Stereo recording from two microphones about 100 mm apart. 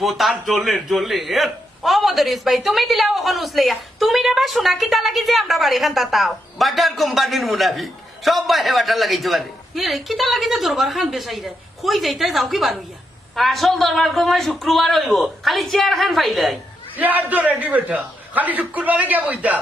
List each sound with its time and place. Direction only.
0.0 s a man's voice: centre (ahead or behind)
17.0 s a man's voice: 15° right (ahead or behind)